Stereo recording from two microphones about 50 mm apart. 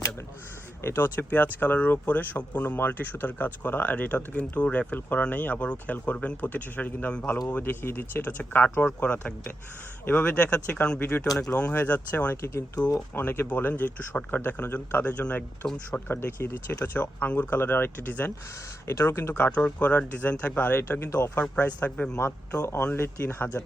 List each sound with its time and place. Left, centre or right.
0.8 s speech: left
4.9 s speech: left
7.5 s speech: left
11.0 s speech: left
12.3 s a man's voice: left
13.1 s speech: left
15.6 s speech: centre
16.2 s a man's voice: left
16.8 s speech: left
18.9 s speech: left
19.5 s speech: left
21.7 s speech: left
22.2 s a man's voice: left
22.9 s speech: left